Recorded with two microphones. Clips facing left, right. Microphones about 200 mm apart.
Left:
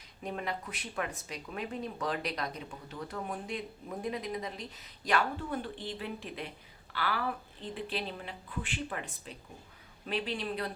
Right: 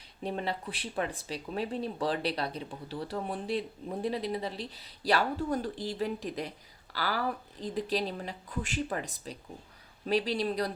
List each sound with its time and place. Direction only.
0.2 s speech: 30° right (ahead or behind)